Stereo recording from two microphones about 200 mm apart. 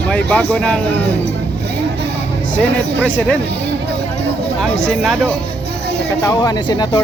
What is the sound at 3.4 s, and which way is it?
Speech, 60° right (ahead or behind).